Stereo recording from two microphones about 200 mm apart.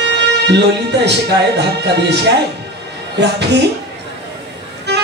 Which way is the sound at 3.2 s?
60° right (ahead or behind).